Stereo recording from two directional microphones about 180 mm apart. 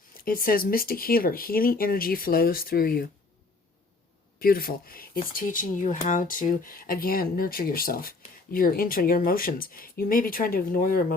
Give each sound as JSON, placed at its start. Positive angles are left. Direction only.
{"t": 0.3, "sound": "speech", "side_deg": 55}
{"t": 4.4, "sound": "speech", "side_deg": 55}